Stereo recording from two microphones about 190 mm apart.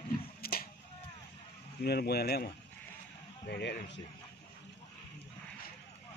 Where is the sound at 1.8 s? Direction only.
55° left (ahead or behind).